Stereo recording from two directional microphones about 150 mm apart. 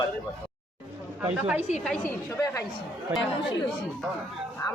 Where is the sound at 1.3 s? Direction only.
10° right (ahead or behind).